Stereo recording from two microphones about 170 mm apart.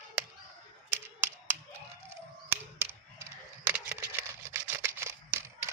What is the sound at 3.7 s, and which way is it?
Camera, 10° right (ahead or behind).